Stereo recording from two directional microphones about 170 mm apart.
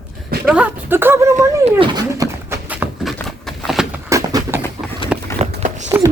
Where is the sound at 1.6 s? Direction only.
30° right (ahead or behind).